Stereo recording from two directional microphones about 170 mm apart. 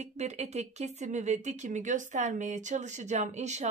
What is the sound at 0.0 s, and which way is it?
A woman's voice, 40° right (ahead or behind).